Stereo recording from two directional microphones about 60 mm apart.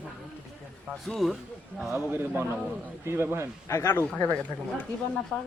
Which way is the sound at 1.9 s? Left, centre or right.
Right.